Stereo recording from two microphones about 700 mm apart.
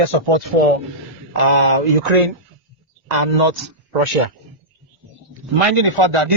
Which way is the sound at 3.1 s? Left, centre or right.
Right.